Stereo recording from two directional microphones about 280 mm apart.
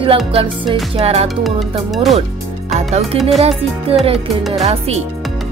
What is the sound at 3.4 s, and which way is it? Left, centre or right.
Music, right.